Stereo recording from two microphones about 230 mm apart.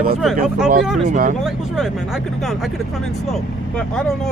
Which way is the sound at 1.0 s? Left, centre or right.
Right.